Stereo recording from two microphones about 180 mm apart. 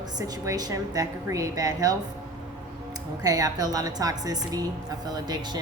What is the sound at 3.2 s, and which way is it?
A woman's voice, 20° right (ahead or behind).